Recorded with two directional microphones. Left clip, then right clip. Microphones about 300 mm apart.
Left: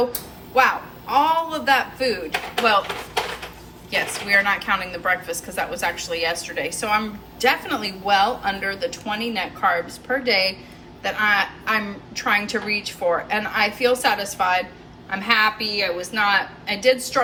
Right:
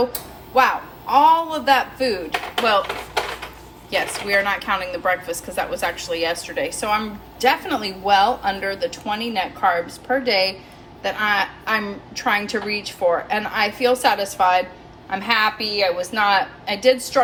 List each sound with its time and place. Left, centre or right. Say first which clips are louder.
0.5 s a woman's voice: right 1 dB; centre
3.9 s a woman's voice: even; centre